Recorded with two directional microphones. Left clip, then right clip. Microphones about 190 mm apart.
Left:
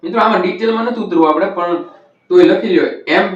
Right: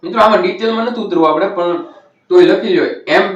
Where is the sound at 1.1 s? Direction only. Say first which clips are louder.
Even; centre (ahead or behind).